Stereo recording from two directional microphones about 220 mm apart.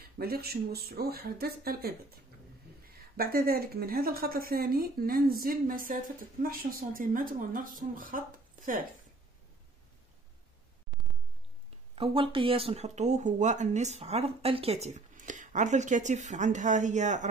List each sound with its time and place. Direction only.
0.0 s speech: 45° right (ahead or behind)
10.9 s a sound: centre (ahead or behind)
11.9 s speech: 25° right (ahead or behind)